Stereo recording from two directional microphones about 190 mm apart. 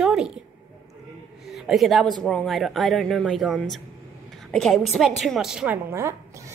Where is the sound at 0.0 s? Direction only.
5° right (ahead or behind).